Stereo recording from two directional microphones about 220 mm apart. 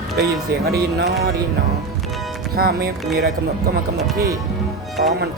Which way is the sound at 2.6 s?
45° right (ahead or behind).